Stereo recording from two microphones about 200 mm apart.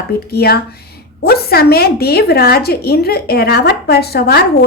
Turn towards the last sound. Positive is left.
turn(degrees=55)  # may be behind; listen again after turning